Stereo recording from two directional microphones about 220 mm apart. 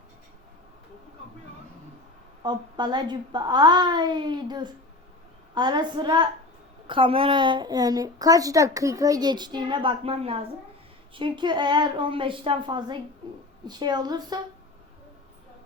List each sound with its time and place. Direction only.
2.4 s a woman's voice: 20° right (ahead or behind)